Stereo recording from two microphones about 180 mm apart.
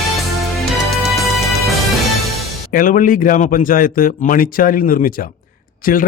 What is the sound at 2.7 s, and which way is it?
A man's voice, 50° left (ahead or behind).